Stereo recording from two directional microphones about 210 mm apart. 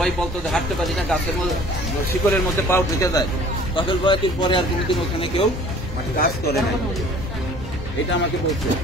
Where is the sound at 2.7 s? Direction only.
15° left (ahead or behind).